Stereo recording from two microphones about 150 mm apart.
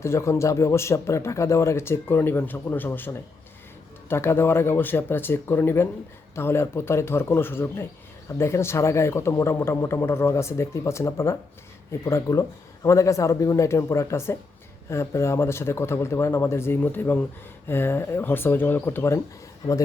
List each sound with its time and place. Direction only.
0.0 s speech: 20° left (ahead or behind)